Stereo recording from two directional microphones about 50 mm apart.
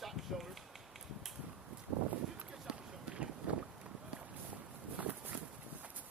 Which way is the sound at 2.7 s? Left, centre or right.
Right.